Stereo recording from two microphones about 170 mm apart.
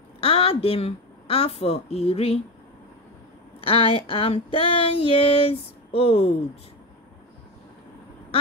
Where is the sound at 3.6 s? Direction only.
35° left (ahead or behind).